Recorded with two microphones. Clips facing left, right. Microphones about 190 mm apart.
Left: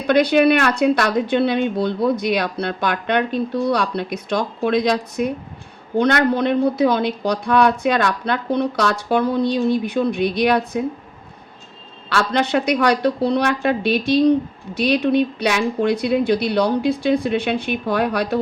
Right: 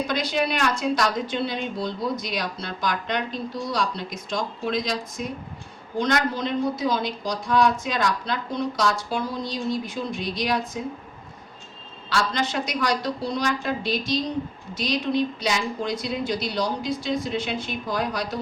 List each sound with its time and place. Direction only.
0.1 s speech: 65° left (ahead or behind)
12.0 s speech: 65° left (ahead or behind)